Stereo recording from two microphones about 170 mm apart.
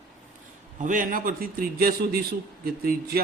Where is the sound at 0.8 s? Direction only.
50° right (ahead or behind).